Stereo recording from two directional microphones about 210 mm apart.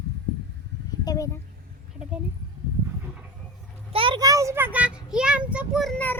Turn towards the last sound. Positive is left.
turn(degrees=5)  # may be behind; listen again after turning